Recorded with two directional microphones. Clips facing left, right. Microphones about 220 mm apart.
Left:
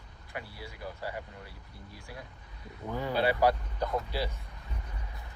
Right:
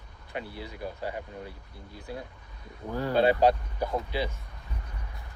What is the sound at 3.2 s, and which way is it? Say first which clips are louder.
Speech: right 4 dB; 20° right (ahead or behind).